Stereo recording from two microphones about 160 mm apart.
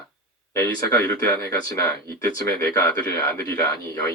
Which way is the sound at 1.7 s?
15° left (ahead or behind).